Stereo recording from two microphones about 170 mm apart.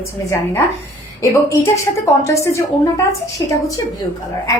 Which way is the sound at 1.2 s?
20° left (ahead or behind).